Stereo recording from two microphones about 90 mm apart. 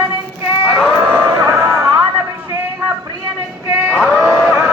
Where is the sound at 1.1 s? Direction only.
25° right (ahead or behind).